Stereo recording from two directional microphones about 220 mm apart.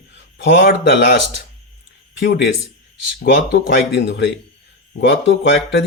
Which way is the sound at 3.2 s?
45° left (ahead or behind).